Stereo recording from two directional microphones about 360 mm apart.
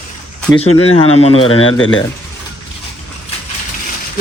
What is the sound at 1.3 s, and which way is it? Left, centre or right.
Speech, left.